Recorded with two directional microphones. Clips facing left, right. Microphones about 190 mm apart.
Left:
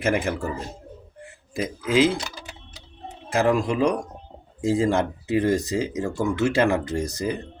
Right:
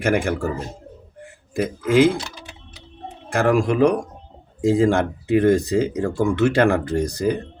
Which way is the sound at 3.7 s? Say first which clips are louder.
Right 5 dB; 60° right (ahead or behind).